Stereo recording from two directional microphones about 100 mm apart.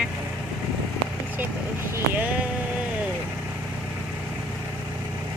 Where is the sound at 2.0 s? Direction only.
20° right (ahead or behind).